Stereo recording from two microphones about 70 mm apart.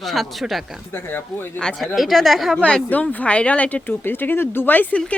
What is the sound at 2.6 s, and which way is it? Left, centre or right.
Speech, centre.